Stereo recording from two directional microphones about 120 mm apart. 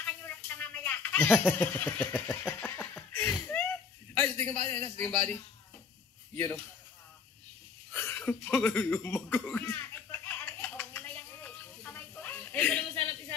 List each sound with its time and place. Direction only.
0.0 s a sound: 10° left (ahead or behind)
1.6 s speech: 15° left (ahead or behind)
3.5 s whimper: 10° left (ahead or behind)
4.1 s a man's voice: 15° left (ahead or behind)
7.9 s chuckle: 15° left (ahead or behind)